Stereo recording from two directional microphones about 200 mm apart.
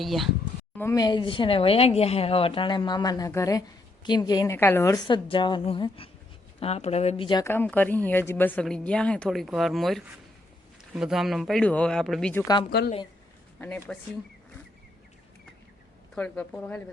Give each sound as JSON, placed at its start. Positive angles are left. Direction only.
{"t": 0.0, "sound": "speech", "side_deg": 0}
{"t": 0.8, "sound": "speech", "side_deg": 15}
{"t": 12.7, "sound": "speech", "side_deg": 55}
{"t": 13.6, "sound": "speech", "side_deg": 10}
{"t": 16.1, "sound": "speech", "side_deg": 5}